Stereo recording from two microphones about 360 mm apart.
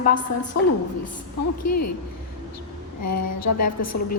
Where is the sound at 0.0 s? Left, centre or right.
Left.